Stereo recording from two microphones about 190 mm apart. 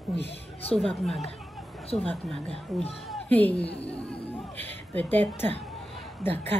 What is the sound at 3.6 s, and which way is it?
Speech, 30° left (ahead or behind).